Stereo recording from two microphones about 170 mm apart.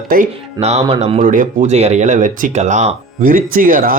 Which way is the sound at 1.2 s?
50° right (ahead or behind).